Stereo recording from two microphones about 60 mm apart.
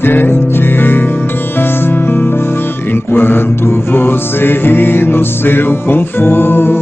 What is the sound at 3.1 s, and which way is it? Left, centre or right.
Music, left.